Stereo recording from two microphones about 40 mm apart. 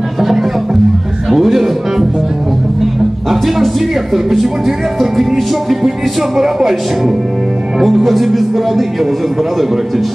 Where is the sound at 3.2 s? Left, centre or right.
Centre.